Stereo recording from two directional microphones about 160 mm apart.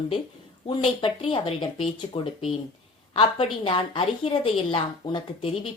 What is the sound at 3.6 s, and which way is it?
A woman's voice, 30° left (ahead or behind).